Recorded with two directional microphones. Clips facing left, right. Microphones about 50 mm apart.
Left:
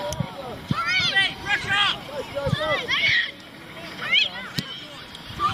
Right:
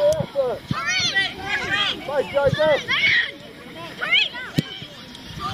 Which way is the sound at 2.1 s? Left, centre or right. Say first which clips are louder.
Right 9 dB; right.